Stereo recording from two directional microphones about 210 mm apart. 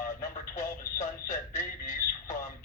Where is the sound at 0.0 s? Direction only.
40° left (ahead or behind).